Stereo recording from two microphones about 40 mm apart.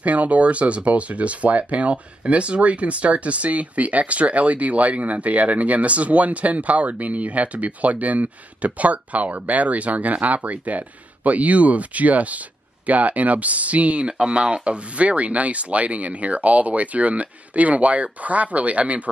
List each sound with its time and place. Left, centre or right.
0.0 s speech: right